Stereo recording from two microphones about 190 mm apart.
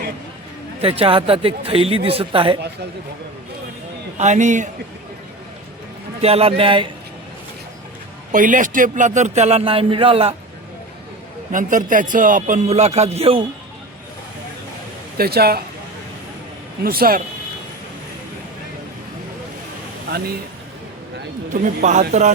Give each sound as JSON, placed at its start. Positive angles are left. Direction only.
{"t": 0.8, "sound": "speech", "side_deg": -30}
{"t": 4.2, "sound": "a man's voice", "side_deg": -40}
{"t": 6.2, "sound": "speech", "side_deg": -30}
{"t": 8.3, "sound": "a man's voice", "side_deg": -45}
{"t": 11.5, "sound": "a man's voice", "side_deg": -45}
{"t": 15.2, "sound": "speech", "side_deg": -55}
{"t": 16.8, "sound": "speech", "side_deg": -50}
{"t": 20.1, "sound": "speech", "side_deg": -55}
{"t": 21.5, "sound": "speech", "side_deg": -45}